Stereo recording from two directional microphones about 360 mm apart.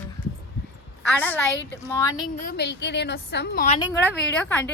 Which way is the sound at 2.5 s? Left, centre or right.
Left.